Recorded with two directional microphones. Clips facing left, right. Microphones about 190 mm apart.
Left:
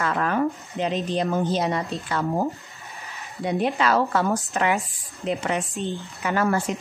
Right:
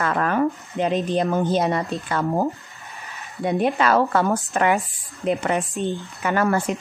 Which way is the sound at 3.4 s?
50° right (ahead or behind).